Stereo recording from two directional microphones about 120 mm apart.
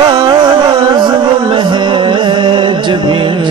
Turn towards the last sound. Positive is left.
turn(degrees=-40)  # may be behind; listen again after turning